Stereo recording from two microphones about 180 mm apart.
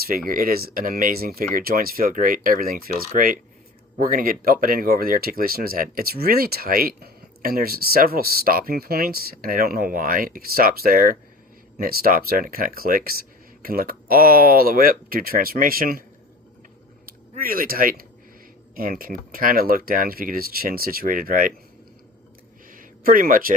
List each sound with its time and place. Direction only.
0.0 s speech: 55° right (ahead or behind)
17.1 s speech: 50° right (ahead or behind)
22.7 s a sound: 50° right (ahead or behind)